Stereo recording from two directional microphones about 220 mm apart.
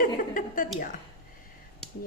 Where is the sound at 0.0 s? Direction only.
40° left (ahead or behind).